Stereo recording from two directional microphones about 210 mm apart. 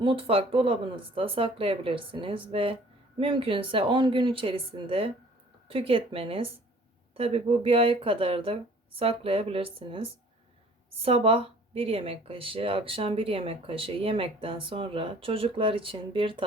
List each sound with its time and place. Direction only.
0.0 s speech: 25° right (ahead or behind)